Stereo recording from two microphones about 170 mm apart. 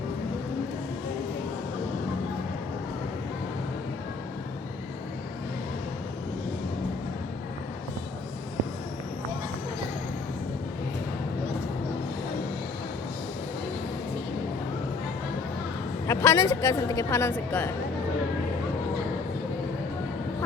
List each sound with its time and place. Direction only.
16.0 s a woman's voice: 15° left (ahead or behind)